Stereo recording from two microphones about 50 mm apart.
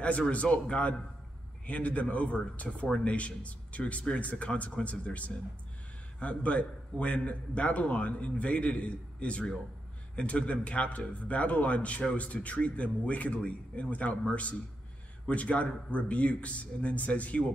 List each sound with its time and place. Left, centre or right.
0.0 s a man's voice: left